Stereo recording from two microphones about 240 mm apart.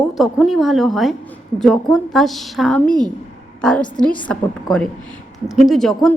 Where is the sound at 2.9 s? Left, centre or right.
Centre.